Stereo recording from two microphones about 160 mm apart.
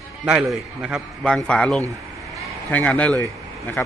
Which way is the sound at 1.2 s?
5° left (ahead or behind).